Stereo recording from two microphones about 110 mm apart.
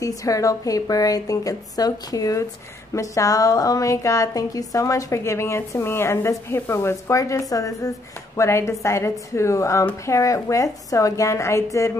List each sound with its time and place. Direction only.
0.0 s a woman's voice: 30° left (ahead or behind)